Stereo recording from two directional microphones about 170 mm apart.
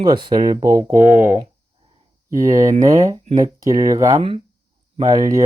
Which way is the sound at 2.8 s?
20° right (ahead or behind).